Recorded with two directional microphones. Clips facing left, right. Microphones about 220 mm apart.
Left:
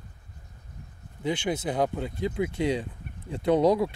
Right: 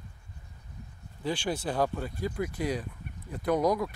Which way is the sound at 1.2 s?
20° left (ahead or behind).